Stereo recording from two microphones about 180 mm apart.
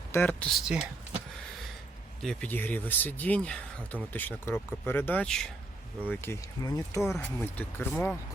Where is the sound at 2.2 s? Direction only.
10° left (ahead or behind).